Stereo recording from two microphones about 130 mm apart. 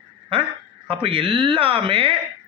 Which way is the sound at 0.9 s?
45° right (ahead or behind).